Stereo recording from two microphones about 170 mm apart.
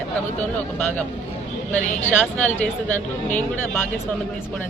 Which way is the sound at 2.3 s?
10° left (ahead or behind).